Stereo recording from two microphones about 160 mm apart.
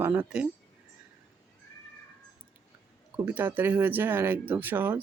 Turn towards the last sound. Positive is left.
turn(degrees=-10)  # may be behind; listen again after turning